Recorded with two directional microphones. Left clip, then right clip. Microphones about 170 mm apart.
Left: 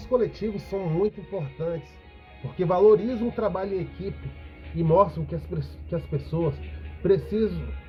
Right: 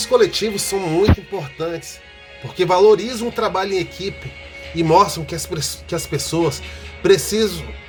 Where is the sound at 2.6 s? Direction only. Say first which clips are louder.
Right 6 dB; 80° right.